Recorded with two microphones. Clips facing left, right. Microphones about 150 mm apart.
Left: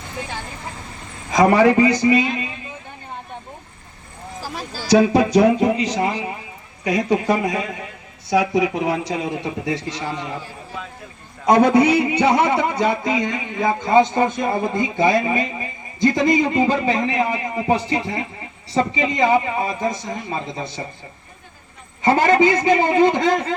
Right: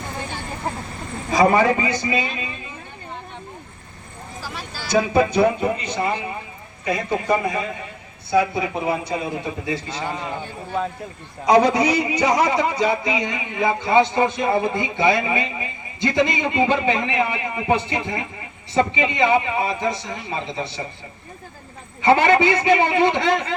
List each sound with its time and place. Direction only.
0.7 s vehicle: 55° right (ahead or behind)
1.3 s a man's voice: 90° left
4.4 s a sound: 40° left (ahead or behind)
4.9 s a man's voice: 85° left
11.4 s a man's voice: 55° left (ahead or behind)
22.0 s a man's voice: 40° left (ahead or behind)